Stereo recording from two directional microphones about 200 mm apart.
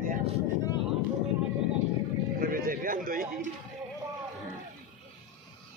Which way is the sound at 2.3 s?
45° right (ahead or behind).